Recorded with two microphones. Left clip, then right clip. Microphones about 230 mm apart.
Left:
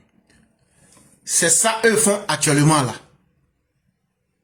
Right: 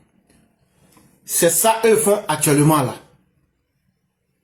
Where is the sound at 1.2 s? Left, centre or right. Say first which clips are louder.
Right 3 dB; left.